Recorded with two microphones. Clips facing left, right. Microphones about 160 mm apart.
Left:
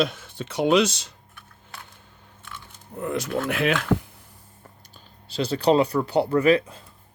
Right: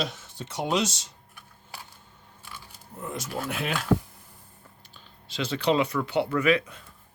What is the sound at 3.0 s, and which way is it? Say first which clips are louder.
Speech: left 7 dB; 70° left (ahead or behind).